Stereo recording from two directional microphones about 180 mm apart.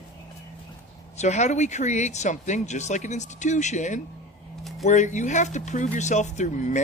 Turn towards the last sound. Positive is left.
turn(degrees=45)  # may be behind; listen again after turning